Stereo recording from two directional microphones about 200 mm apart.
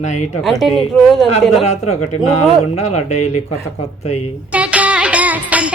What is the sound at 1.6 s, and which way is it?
Speech, 35° left (ahead or behind).